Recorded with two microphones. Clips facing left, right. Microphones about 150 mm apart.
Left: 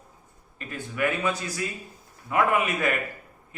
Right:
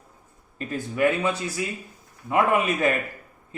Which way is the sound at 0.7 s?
30° right (ahead or behind).